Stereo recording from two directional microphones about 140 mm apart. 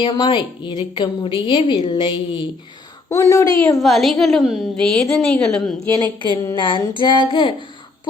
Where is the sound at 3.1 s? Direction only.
20° left (ahead or behind).